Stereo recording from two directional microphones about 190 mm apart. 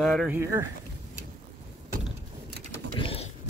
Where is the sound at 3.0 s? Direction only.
30° left (ahead or behind).